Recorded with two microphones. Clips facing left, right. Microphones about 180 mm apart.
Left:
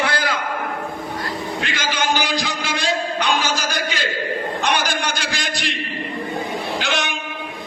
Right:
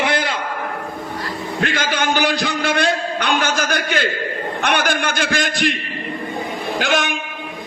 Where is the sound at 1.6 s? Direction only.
50° right (ahead or behind).